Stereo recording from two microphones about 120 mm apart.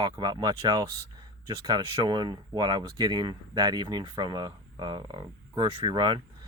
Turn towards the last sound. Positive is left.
turn(degrees=-40)  # may be behind; listen again after turning